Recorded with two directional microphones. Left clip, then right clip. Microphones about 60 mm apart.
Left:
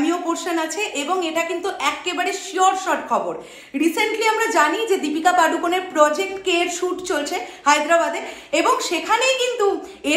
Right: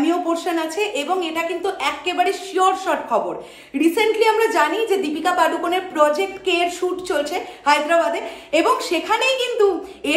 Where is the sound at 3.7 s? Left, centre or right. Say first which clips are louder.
Right 2 dB; right.